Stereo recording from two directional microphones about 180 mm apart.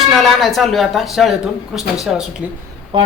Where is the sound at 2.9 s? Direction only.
25° right (ahead or behind).